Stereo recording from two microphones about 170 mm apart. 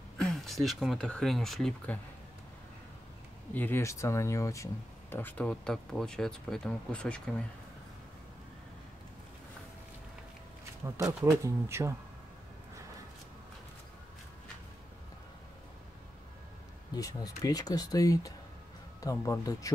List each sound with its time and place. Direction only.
0.2 s speech: centre (ahead or behind)
3.5 s speech: 10° left (ahead or behind)
11.2 s speech: 15° right (ahead or behind)
16.9 s speech: 20° left (ahead or behind)